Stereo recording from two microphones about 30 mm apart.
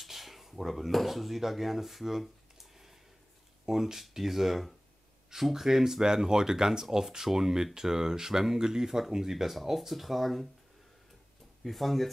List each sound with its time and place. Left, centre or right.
0.0 s speech: centre
11.6 s speech: centre